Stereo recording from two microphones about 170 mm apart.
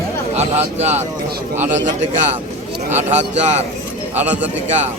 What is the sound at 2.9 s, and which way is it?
Speech, 40° right (ahead or behind).